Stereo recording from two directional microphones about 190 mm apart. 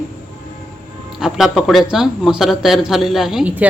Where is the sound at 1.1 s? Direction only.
Centre (ahead or behind).